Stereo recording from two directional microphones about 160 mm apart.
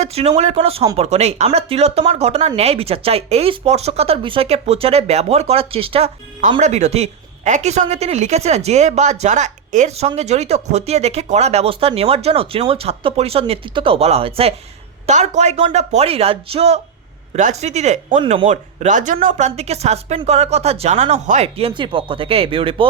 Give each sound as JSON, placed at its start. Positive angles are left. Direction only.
{"t": 0.0, "sound": "speech", "side_deg": -40}
{"t": 6.6, "sound": "a woman's voice", "side_deg": -45}